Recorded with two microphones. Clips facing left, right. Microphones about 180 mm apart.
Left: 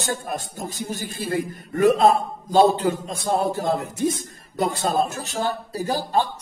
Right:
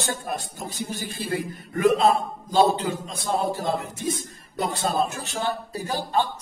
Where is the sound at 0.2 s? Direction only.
45° left (ahead or behind).